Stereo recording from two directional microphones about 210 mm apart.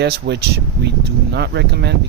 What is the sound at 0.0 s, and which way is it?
Speech, 50° right (ahead or behind).